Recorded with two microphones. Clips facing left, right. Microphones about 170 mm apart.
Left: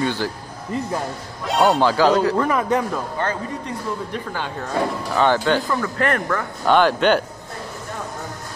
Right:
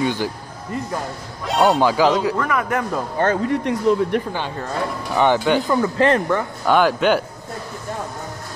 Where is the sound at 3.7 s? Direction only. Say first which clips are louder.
Right 12 dB; 90° right.